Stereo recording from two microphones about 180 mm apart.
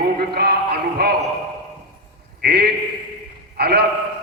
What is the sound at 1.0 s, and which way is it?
Speech, 60° right (ahead or behind).